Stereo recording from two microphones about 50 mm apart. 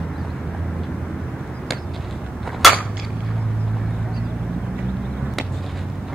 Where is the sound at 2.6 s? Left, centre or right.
Centre.